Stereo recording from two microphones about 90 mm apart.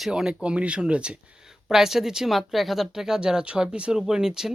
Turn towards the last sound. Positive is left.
turn(degrees=-5)  # may be behind; listen again after turning